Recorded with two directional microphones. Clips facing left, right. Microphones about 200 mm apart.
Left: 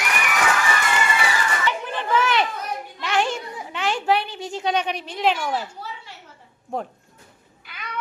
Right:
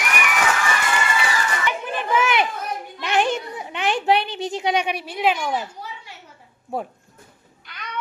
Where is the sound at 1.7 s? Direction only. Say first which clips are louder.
Right 1 dB; 10° right (ahead or behind).